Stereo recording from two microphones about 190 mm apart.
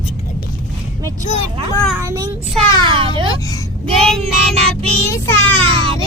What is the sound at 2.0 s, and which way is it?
Child singing, 15° right (ahead or behind).